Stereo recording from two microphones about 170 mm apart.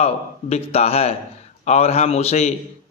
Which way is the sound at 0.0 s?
35° left (ahead or behind).